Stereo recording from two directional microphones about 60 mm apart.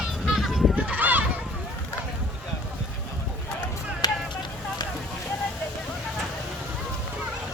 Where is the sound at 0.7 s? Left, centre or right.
Right.